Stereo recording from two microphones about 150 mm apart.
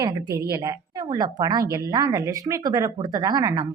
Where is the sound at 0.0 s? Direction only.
25° right (ahead or behind).